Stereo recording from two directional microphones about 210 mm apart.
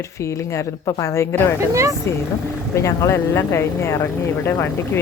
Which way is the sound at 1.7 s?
15° right (ahead or behind).